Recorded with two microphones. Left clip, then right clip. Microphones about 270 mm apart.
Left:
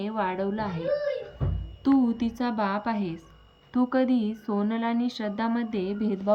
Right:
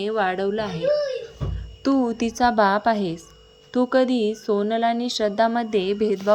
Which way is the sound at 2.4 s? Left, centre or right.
Centre.